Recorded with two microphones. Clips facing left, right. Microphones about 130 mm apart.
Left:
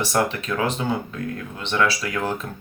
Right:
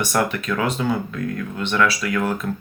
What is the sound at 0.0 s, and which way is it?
Speech, 30° left (ahead or behind).